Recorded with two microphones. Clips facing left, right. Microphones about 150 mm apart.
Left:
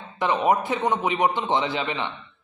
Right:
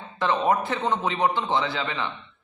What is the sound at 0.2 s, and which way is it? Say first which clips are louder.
A man's voice: left 1 dB; 15° left (ahead or behind).